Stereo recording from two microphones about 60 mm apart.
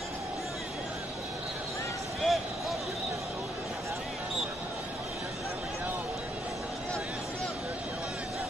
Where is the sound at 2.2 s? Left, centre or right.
Centre.